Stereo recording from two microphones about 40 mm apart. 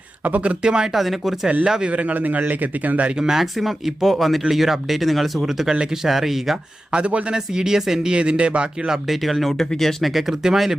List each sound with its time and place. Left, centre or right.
0.3 s a man's voice: right
0.6 s speech: right
0.9 s speech: centre
1.6 s speech: right
1.9 s a man's voice: right
3.2 s speech: centre
6.9 s speech: right
7.3 s speech: centre
8.9 s speech: centre
10.1 s speech: centre